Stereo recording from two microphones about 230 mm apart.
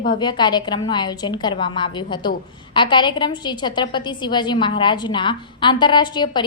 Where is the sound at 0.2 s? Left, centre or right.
Centre.